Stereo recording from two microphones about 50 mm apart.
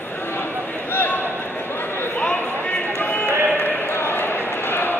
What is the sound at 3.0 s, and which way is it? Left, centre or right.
Clip-clop, left.